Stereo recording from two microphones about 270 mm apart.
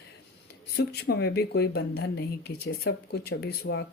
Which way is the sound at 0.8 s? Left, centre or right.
Left.